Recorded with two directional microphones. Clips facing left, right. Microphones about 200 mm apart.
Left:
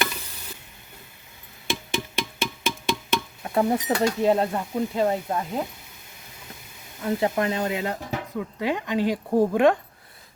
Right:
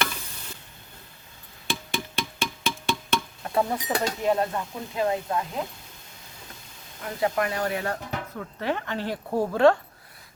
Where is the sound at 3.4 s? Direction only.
15° left (ahead or behind).